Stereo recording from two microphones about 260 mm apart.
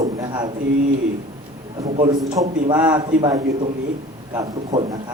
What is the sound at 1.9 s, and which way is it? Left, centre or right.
A man's voice, right.